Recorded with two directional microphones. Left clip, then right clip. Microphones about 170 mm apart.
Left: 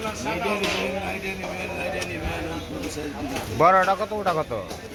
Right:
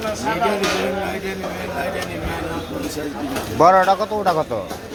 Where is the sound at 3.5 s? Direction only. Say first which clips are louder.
Right 5 dB; 5° right (ahead or behind).